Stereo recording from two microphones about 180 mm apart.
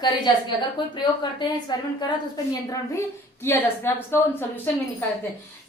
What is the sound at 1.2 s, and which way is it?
A woman's voice, 25° left (ahead or behind).